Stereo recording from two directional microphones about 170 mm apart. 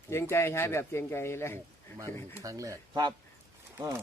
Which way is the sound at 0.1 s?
15° left (ahead or behind).